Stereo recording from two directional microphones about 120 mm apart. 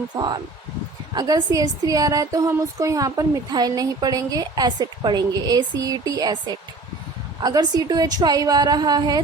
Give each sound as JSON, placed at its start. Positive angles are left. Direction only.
{"t": 1.1, "sound": "speech", "side_deg": -35}